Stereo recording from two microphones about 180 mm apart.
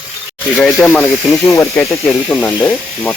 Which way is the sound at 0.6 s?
5° left (ahead or behind).